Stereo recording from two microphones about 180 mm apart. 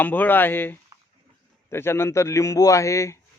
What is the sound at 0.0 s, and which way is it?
A man's voice, 10° left (ahead or behind).